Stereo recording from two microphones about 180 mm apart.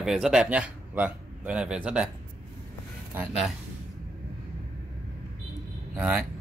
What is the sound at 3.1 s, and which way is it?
Speech, centre (ahead or behind).